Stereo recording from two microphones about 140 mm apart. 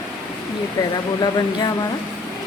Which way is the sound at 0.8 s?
30° left (ahead or behind).